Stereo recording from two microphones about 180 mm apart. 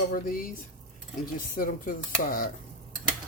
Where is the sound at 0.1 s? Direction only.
50° left (ahead or behind).